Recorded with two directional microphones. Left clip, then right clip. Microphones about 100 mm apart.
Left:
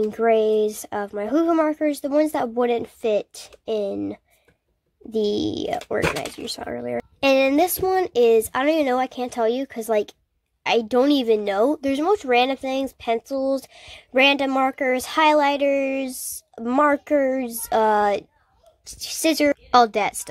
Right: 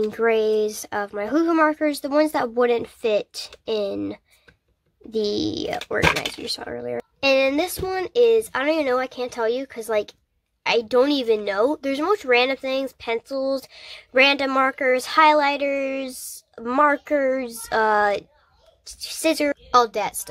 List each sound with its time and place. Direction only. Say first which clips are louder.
0.1 s speech: left 3 dB; 20° left (ahead or behind)
7.2 s speech: left 1 dB; 55° left (ahead or behind)